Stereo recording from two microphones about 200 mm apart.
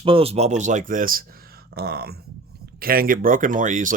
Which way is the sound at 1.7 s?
50° right (ahead or behind).